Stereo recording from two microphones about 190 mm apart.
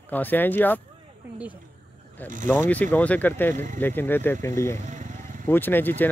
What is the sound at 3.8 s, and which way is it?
Speech, 10° left (ahead or behind).